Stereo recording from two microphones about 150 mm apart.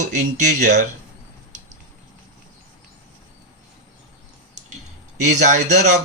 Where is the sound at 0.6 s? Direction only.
55° right (ahead or behind).